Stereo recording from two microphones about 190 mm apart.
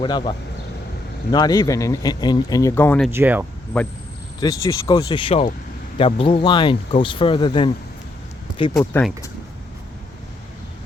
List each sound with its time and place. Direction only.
0.0 s speech: 25° left (ahead or behind)
3.1 s speech: 10° right (ahead or behind)
3.7 s speech: 5° left (ahead or behind)
4.4 s speech: 20° left (ahead or behind)
8.8 s speech: 10° left (ahead or behind)